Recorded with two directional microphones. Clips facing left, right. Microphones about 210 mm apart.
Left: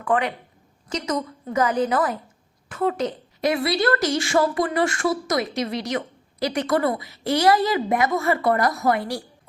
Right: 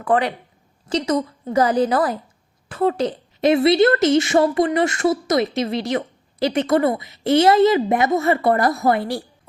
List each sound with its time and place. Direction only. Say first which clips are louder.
0.0 s a woman's voice: right 3 dB; 35° right (ahead or behind)